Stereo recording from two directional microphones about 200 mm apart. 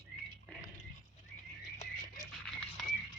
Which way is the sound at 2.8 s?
Centre (ahead or behind).